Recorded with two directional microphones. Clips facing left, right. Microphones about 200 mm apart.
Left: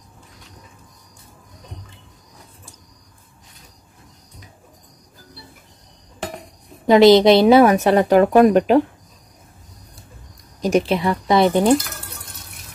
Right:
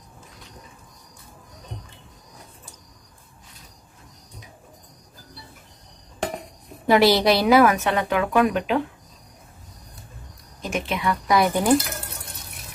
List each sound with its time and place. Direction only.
6.9 s a woman's voice: 20° left (ahead or behind); by 8.8 s 40° left (ahead or behind)
10.9 s speech: 30° left (ahead or behind)